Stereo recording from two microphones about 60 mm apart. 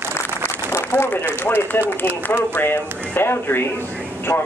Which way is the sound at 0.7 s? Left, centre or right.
Left.